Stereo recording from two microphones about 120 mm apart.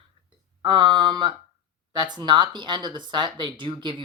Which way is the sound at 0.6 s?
40° right (ahead or behind).